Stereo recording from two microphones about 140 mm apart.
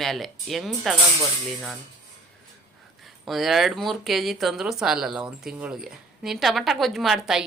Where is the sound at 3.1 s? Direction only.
Centre (ahead or behind).